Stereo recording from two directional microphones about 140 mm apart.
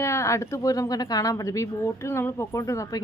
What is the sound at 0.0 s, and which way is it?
A woman's voice, 20° left (ahead or behind).